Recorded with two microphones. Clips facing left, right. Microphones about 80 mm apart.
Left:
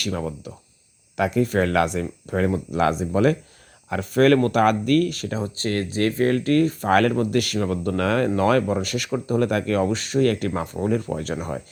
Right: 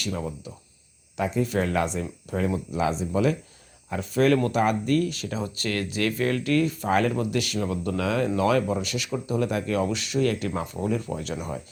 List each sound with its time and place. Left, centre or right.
0.0 s speech: left